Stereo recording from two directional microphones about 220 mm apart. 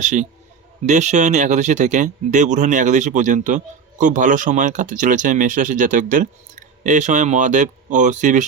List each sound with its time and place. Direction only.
0.0 s speech: 35° right (ahead or behind)